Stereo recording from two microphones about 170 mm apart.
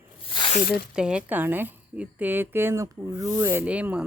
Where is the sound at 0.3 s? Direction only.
30° left (ahead or behind).